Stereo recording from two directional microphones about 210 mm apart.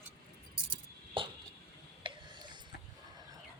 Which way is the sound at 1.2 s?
25° right (ahead or behind).